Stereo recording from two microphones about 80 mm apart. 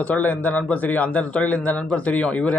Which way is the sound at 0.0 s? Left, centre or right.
Centre.